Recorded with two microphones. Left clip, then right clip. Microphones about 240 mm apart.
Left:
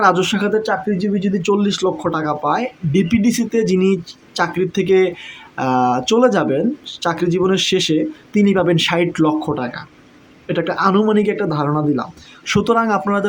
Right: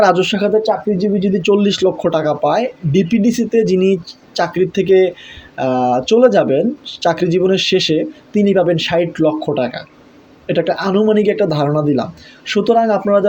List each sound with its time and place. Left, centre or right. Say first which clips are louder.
0.0 s speech: right 3 dB; centre
12.5 s speech: right 3 dB; centre